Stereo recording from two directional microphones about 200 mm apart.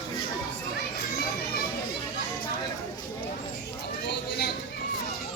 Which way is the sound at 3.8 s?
55° left (ahead or behind).